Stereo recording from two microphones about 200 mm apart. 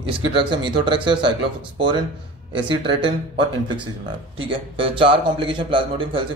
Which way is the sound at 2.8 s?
25° right (ahead or behind).